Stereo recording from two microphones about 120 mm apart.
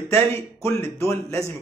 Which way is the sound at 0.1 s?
20° left (ahead or behind).